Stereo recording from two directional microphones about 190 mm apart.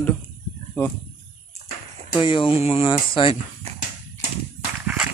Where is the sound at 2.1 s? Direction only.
25° left (ahead or behind).